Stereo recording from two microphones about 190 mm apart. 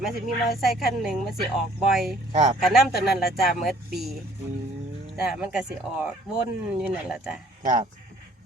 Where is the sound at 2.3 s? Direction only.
35° right (ahead or behind).